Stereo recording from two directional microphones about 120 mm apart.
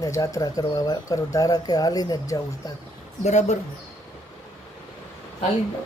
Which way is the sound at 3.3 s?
70° left (ahead or behind).